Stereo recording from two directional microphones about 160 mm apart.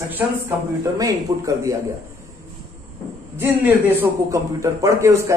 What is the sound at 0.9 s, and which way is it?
Speech, 20° right (ahead or behind).